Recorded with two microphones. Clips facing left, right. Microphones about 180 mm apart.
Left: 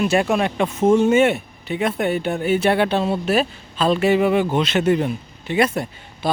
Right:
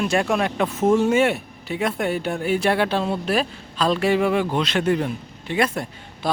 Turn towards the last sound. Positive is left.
turn(degrees=5)  # may be behind; listen again after turning